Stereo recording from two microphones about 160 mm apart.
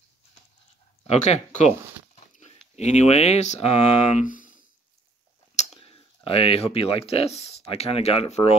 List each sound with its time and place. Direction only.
1.0 s speech: 45° left (ahead or behind)
5.6 s speech: 35° left (ahead or behind)